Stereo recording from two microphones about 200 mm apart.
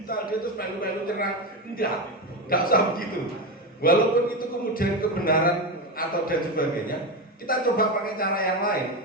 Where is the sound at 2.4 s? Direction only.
45° left (ahead or behind).